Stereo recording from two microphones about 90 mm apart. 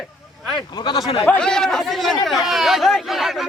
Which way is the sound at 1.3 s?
10° left (ahead or behind).